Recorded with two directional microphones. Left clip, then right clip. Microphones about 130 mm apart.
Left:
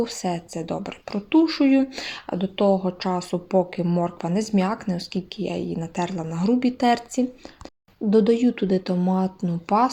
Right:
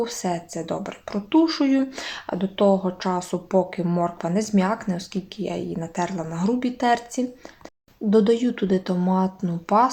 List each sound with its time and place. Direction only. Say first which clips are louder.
0.0 s speech: even; 40° left (ahead or behind)